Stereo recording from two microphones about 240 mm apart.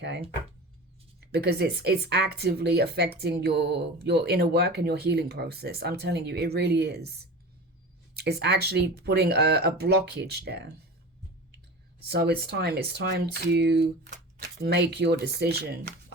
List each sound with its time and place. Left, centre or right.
0.0 s speech: right
1.3 s speech: right
8.1 s speech: right
12.1 s speech: right